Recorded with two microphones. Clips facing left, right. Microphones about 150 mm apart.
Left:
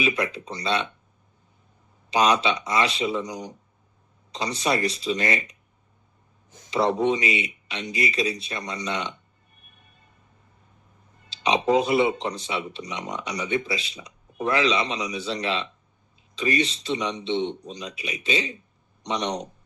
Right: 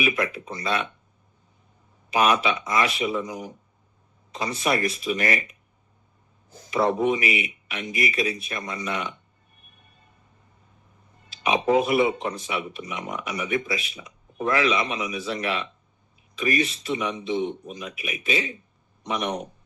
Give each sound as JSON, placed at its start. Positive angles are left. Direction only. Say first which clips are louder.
{"t": 0.0, "sound": "a man's voice", "louder": "even", "side_deg": 25}
{"t": 2.2, "sound": "a man's voice", "louder": "even", "side_deg": 25}
{"t": 6.9, "sound": "a man's voice", "louder": "even", "side_deg": 25}
{"t": 11.3, "sound": "a sound", "louder": "left 1 dB", "side_deg": 25}
{"t": 11.9, "sound": "a man's voice", "louder": "even", "side_deg": 30}